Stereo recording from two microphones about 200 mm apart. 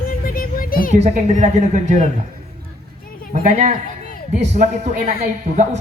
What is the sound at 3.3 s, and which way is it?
A man's voice, 35° right (ahead or behind).